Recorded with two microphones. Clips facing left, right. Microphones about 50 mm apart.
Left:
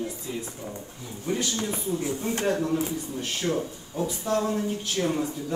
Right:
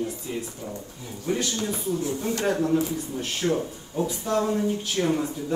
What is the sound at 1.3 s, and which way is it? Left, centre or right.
Speech, right.